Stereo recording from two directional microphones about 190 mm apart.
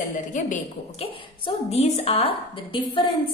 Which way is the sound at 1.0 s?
30° left (ahead or behind).